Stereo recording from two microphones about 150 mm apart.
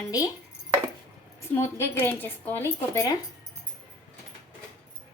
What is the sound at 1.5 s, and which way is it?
Speech, 15° left (ahead or behind).